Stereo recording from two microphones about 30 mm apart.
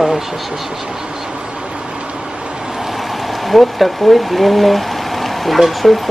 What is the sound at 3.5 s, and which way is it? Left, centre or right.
Speech, centre.